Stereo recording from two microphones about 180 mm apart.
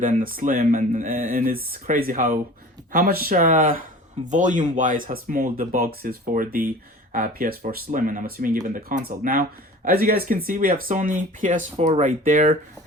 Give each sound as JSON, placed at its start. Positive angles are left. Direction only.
{"t": 0.0, "sound": "speech", "side_deg": -50}